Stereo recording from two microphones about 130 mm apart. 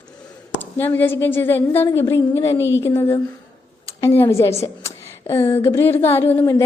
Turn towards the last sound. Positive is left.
turn(degrees=25)  # may be behind; listen again after turning